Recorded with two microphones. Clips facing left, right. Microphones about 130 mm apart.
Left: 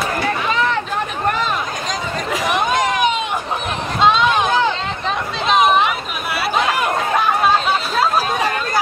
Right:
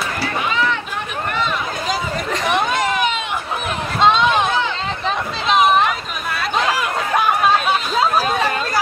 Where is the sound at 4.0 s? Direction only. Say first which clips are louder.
Even; centre (ahead or behind).